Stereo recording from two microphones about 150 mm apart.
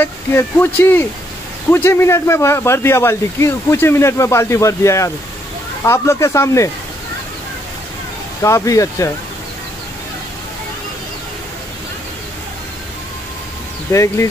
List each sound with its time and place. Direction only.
0.0 s speech: 15° left (ahead or behind)
8.4 s speech: 20° left (ahead or behind)
13.9 s speech: 20° left (ahead or behind)